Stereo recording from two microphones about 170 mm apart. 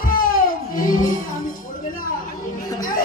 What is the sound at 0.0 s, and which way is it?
Music, 55° left (ahead or behind).